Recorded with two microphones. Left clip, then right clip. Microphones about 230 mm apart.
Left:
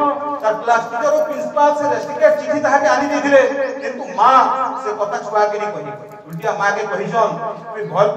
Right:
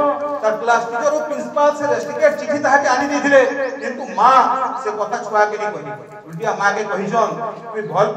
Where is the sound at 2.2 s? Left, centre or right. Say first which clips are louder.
Left 3 dB; right.